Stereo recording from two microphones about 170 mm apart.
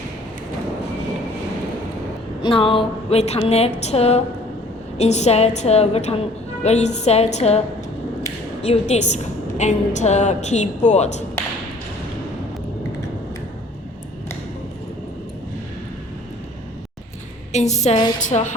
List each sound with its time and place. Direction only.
2.4 s a woman's voice: 30° left (ahead or behind)
8.6 s a woman's voice: 40° left (ahead or behind)
17.5 s a woman's voice: 40° left (ahead or behind)